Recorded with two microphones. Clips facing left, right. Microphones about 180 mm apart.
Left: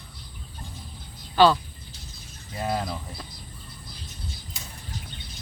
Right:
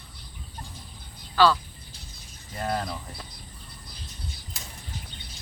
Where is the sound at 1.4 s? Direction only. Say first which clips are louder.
Left 3 dB; 20° left (ahead or behind).